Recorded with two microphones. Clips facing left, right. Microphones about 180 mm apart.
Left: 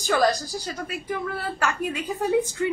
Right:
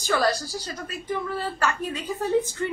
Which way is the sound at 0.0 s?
15° left (ahead or behind).